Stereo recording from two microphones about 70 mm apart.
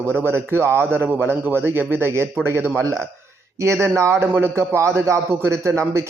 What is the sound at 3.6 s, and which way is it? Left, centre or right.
A man's voice, right.